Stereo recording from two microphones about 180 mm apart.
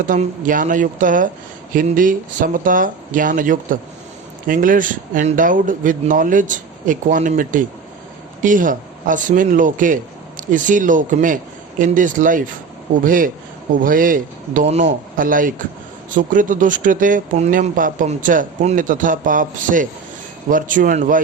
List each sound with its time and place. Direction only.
0.1 s speech: 45° right (ahead or behind)